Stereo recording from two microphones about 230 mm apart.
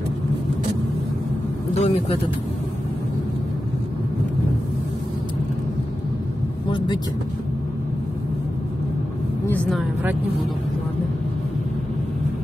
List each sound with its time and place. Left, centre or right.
1.7 s speech: left
9.6 s speech: centre